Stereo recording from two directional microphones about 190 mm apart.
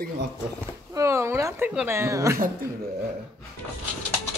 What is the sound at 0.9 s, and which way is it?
Speech, 15° right (ahead or behind).